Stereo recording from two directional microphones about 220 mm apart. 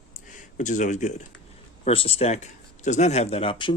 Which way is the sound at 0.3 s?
35° left (ahead or behind).